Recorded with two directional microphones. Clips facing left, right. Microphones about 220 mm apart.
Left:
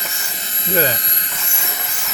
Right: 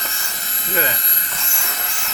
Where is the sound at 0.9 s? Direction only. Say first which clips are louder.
Left 3 dB; 20° left (ahead or behind).